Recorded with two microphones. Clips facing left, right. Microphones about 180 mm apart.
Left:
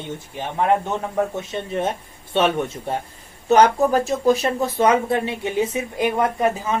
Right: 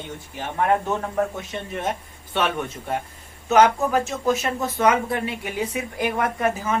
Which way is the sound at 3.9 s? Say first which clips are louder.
Left 4 dB; 35° left (ahead or behind).